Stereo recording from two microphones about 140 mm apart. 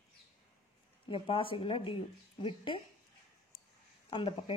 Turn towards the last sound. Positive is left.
turn(degrees=35)  # may be behind; listen again after turning